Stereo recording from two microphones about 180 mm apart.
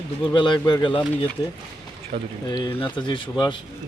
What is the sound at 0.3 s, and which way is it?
Speech, 25° left (ahead or behind).